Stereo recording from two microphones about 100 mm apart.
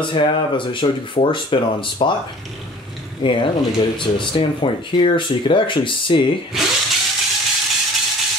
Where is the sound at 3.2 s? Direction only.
60° left (ahead or behind).